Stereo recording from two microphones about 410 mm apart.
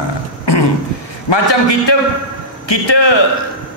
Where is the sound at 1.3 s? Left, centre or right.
Left.